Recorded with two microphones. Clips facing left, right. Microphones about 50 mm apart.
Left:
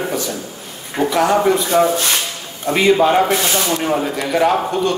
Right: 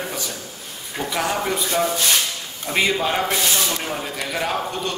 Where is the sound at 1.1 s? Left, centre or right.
Centre.